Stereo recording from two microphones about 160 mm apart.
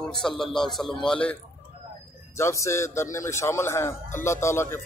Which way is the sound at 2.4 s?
20° left (ahead or behind).